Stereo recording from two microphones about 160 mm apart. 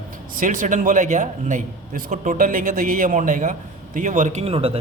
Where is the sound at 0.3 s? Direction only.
55° right (ahead or behind).